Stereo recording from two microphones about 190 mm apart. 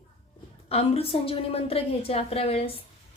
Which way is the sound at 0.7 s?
30° left (ahead or behind).